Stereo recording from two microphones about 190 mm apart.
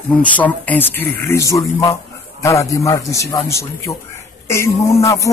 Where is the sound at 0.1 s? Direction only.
10° left (ahead or behind).